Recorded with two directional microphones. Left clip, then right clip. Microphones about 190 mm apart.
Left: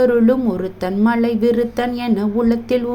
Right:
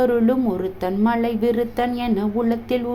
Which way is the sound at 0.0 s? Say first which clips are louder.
Left 4 dB; 10° left (ahead or behind).